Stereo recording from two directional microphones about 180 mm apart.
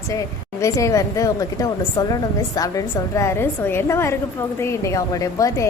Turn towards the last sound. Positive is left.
turn(degrees=15)  # may be behind; listen again after turning